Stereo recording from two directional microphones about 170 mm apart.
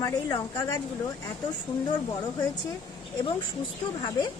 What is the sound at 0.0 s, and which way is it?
Speech, 25° left (ahead or behind).